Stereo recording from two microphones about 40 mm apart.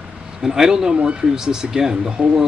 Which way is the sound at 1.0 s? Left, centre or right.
Right.